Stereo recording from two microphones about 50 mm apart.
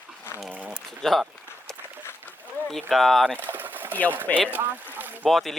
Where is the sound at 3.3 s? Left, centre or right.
Right.